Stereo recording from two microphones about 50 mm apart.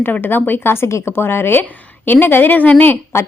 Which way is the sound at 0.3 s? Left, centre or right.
Left.